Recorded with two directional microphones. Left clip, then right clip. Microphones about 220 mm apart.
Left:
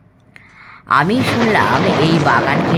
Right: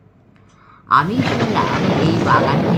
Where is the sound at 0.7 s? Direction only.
50° left (ahead or behind).